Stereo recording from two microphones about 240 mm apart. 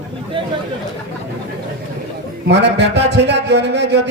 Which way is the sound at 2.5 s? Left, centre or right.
Right.